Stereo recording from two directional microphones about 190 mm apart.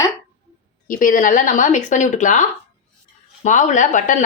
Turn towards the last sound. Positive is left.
turn(degrees=40)  # may be behind; listen again after turning